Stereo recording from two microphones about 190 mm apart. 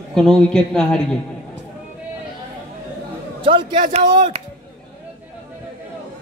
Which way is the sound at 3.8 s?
40° right (ahead or behind).